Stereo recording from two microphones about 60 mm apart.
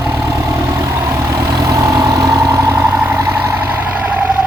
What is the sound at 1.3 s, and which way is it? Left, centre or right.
Vehicle, right.